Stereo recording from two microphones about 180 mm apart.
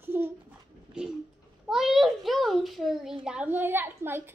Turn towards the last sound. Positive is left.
turn(degrees=-10)  # may be behind; listen again after turning